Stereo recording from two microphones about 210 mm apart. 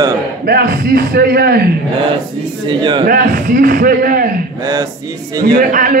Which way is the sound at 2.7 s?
20° right (ahead or behind).